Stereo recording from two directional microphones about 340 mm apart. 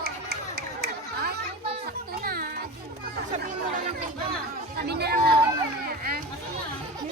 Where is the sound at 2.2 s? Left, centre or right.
Right.